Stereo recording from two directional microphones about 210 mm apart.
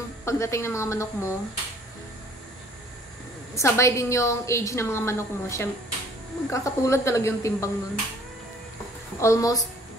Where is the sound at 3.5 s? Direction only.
15° left (ahead or behind).